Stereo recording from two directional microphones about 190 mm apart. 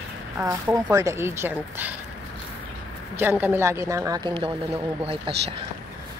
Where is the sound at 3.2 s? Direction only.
10° right (ahead or behind); by 5.4 s 30° right (ahead or behind).